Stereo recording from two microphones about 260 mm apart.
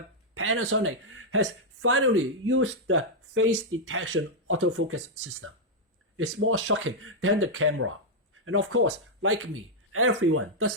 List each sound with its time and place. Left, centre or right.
0.3 s speech: right